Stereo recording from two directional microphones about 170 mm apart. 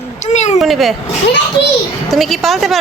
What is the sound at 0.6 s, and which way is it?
Speech, centre (ahead or behind).